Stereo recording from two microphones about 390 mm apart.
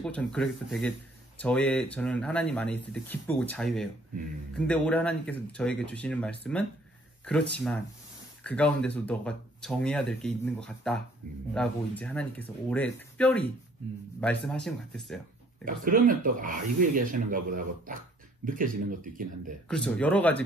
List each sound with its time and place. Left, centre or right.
0.0 s speech: centre
15.6 s speech: right
19.7 s speech: centre